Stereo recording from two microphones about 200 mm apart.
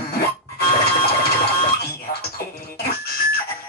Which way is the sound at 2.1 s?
50° left (ahead or behind).